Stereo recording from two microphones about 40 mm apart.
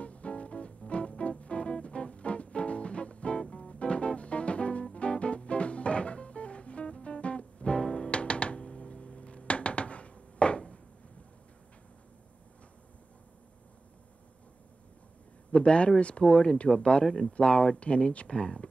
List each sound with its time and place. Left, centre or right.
0.0 s music: left
15.5 s speech: left